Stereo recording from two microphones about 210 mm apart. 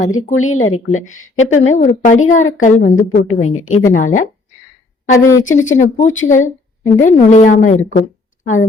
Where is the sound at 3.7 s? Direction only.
40° left (ahead or behind).